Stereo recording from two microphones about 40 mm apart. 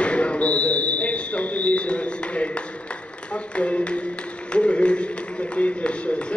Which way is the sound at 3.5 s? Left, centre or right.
Left.